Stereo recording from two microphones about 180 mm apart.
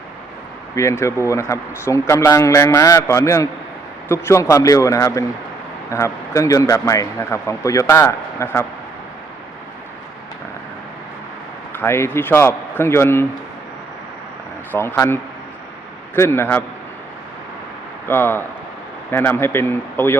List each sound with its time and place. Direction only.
0.8 s a man's voice: 15° left (ahead or behind)
11.7 s a man's voice: 15° left (ahead or behind)
14.7 s a man's voice: 10° left (ahead or behind)
18.1 s a man's voice: 10° left (ahead or behind)